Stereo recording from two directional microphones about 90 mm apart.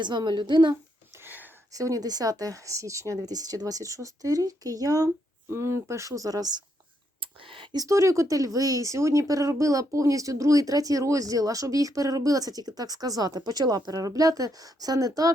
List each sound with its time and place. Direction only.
0.0 s a woman's voice: 55° right (ahead or behind)
1.2 s a sound: 20° right (ahead or behind)
1.7 s speech: 40° right (ahead or behind)
7.2 s whispering: 75° right (ahead or behind)
7.8 s speech: 35° right (ahead or behind)